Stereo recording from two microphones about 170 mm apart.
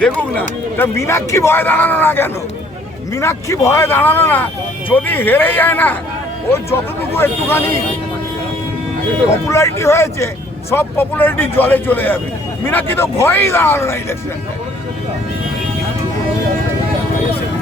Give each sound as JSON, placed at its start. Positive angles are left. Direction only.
{"t": 0.0, "sound": "a man's voice", "side_deg": 10}
{"t": 9.5, "sound": "a man's voice", "side_deg": 15}